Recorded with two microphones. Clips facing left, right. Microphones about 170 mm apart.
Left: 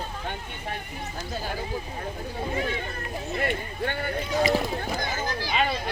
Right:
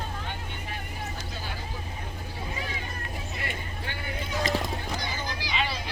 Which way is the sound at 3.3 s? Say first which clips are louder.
Left 8 dB; 55° left (ahead or behind).